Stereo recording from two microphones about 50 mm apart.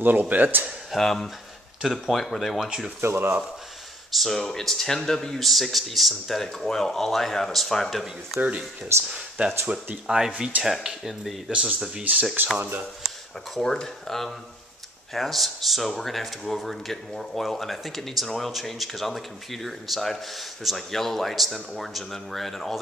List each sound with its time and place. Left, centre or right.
0.0 s speech: right
0.9 s speech: centre
1.8 s speech: centre
3.0 s speech: right
4.1 s speech: centre
8.4 s speech: right
10.0 s speech: centre
12.0 s speech: right
13.6 s speech: centre